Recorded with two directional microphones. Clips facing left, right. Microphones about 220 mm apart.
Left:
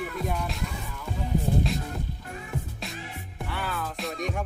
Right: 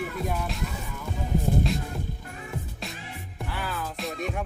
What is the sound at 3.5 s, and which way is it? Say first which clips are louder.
Speech: left 1 dB; centre (ahead or behind).